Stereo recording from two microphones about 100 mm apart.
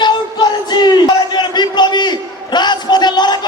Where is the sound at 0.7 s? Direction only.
45° left (ahead or behind).